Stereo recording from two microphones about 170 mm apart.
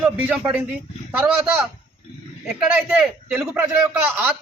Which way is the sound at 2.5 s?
Centre (ahead or behind).